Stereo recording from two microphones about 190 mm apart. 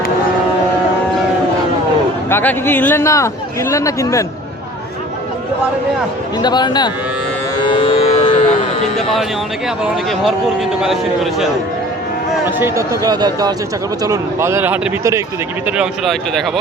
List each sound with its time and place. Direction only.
2.3 s speech: 10° left (ahead or behind)
6.4 s a man's voice: 20° left (ahead or behind)
7.6 s music: 25° left (ahead or behind)
9.8 s a man's voice: centre (ahead or behind)
12.5 s speech: 10° right (ahead or behind)
15.6 s a man's voice: 5° right (ahead or behind)